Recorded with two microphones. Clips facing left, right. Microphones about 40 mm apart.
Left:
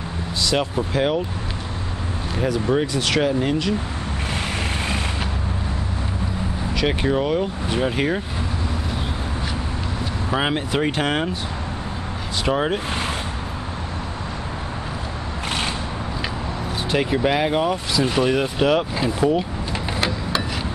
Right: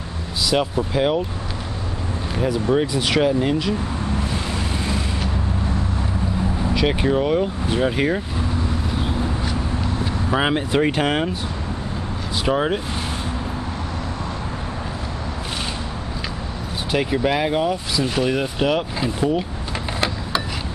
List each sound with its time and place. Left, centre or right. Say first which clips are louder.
0.5 s speech: right 2 dB; centre
2.9 s speech: right 1 dB; centre
3.2 s speech: right 2 dB; centre
6.7 s vehicle: right 1 dB; centre
7.0 s speech: right 1 dB; centre
10.3 s speech: right 2 dB; centre
12.4 s speech: right 1 dB; centre
16.9 s speech: even; centre